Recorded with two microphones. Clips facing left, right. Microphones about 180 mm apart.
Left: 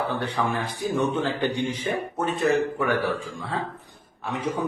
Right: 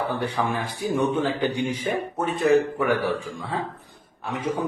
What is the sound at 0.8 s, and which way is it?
Speech, 10° right (ahead or behind).